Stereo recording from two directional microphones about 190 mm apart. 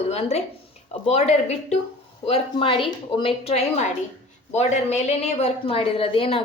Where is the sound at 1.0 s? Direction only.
35° left (ahead or behind).